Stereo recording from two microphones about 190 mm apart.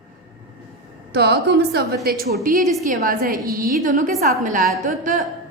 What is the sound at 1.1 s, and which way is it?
A woman's voice, 60° right (ahead or behind).